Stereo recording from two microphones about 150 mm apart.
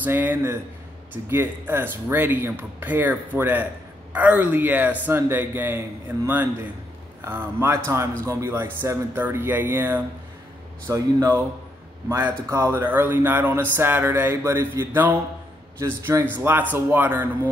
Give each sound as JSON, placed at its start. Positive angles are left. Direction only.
{"t": 0.0, "sound": "speech", "side_deg": -10}
{"t": 10.9, "sound": "speech", "side_deg": -25}